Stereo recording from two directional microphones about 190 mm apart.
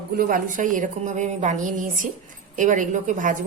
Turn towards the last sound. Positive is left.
turn(degrees=-40)  # may be behind; listen again after turning